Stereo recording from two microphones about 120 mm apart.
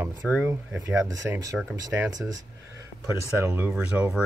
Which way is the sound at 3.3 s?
20° right (ahead or behind).